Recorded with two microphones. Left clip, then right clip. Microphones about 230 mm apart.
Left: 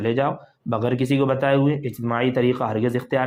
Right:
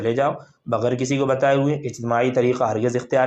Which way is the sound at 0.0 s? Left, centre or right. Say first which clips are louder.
Right 2 dB; left.